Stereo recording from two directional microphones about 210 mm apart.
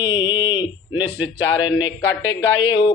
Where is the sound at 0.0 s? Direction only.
20° left (ahead or behind).